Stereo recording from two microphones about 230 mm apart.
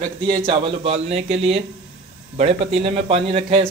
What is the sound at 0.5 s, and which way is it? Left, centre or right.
A man's voice, right.